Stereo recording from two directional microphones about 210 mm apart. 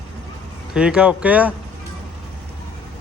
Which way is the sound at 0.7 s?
5° right (ahead or behind).